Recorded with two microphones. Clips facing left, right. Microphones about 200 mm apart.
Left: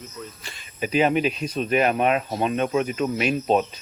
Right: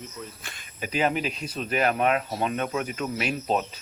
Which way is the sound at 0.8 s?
20° left (ahead or behind).